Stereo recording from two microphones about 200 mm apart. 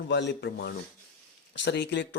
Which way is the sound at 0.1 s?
60° left (ahead or behind).